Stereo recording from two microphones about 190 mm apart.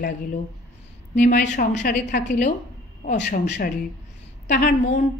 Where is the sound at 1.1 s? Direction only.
45° left (ahead or behind).